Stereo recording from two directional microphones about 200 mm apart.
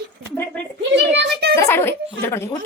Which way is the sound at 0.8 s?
55° right (ahead or behind).